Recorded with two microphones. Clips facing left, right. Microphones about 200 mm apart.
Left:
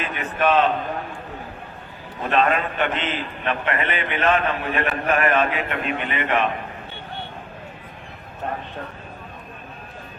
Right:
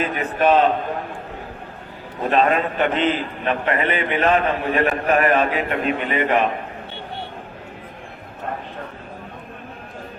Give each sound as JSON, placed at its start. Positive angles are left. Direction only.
{"t": 0.0, "sound": "a man's voice", "side_deg": -40}
{"t": 2.2, "sound": "a man's voice", "side_deg": -35}